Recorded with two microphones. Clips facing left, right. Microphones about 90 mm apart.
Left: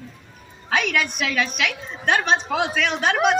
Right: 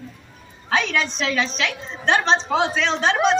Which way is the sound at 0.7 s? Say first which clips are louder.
Right 1 dB; 25° right (ahead or behind).